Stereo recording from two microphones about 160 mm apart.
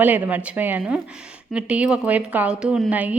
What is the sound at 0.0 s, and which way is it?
A woman's voice, 10° right (ahead or behind).